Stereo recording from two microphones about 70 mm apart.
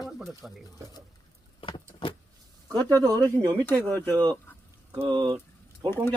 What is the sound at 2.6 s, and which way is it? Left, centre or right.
Speech, right.